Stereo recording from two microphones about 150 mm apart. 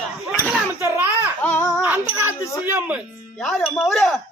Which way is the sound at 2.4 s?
20° left (ahead or behind).